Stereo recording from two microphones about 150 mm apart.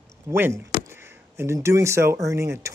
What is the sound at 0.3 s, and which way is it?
Speech, 15° right (ahead or behind).